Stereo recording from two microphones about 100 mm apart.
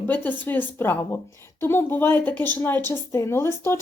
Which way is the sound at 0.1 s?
20° left (ahead or behind).